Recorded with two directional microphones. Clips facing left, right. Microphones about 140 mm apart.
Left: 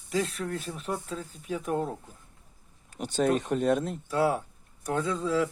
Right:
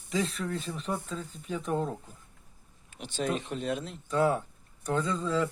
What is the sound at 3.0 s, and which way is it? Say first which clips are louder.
Speech: left 6 dB; 45° left (ahead or behind).